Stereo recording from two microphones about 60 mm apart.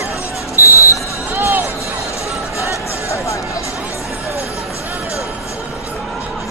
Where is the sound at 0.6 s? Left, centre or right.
Left.